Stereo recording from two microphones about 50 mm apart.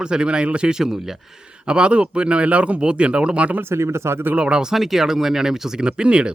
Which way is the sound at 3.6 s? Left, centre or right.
Right.